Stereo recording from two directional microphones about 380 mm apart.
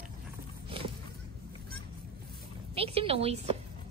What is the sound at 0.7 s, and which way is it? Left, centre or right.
Horse, centre.